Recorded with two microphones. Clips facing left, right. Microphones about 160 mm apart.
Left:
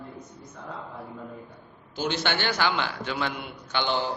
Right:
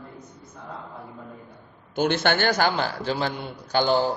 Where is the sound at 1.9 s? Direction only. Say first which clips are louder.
Right 6 dB; 55° right (ahead or behind).